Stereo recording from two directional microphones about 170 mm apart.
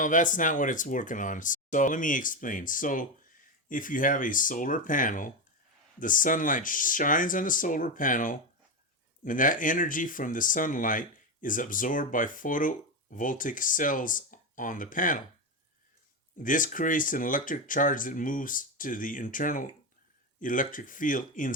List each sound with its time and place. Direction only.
0.0 s speech: 50° left (ahead or behind)
16.4 s speech: 50° left (ahead or behind)